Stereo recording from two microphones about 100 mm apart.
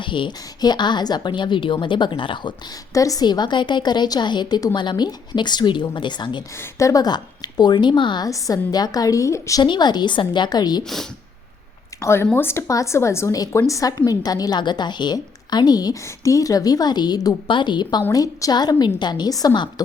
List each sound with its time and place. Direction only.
0.0 s a woman's voice: 55° left (ahead or behind)
2.9 s a woman's voice: 35° left (ahead or behind)
6.7 s a woman's voice: 35° left (ahead or behind); by 8.3 s 50° left (ahead or behind)
8.3 s a woman's voice: 35° left (ahead or behind)
9.6 s a woman's voice: 45° left (ahead or behind)
11.9 s a woman's voice: 25° left (ahead or behind); by 18.0 s 50° left (ahead or behind)
18.1 s a woman's voice: 35° left (ahead or behind)